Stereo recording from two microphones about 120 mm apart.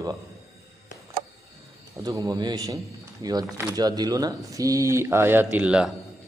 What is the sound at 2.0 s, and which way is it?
A man's voice, 30° right (ahead or behind).